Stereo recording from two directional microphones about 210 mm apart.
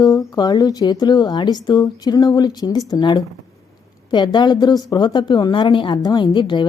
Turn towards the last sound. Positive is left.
turn(degrees=20)  # may be behind; listen again after turning